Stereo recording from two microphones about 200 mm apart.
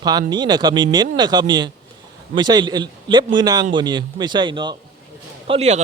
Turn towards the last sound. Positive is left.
turn(degrees=-35)  # may be behind; listen again after turning